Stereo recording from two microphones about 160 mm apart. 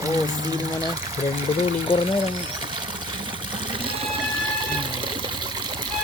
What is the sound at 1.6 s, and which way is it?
Speech, 35° left (ahead or behind).